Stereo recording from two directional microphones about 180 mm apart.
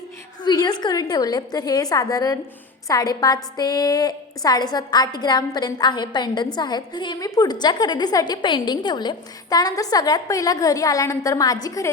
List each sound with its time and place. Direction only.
0.4 s a woman's voice: 25° left (ahead or behind)